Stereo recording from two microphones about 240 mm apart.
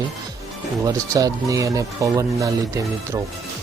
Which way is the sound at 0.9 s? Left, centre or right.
Centre.